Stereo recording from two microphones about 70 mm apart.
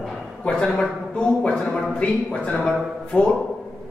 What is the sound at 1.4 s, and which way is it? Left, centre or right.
A man's voice, centre.